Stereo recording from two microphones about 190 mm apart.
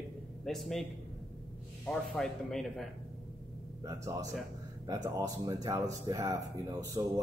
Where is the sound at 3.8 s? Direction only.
20° right (ahead or behind).